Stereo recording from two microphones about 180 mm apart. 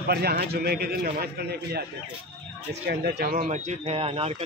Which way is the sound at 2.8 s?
60° right (ahead or behind).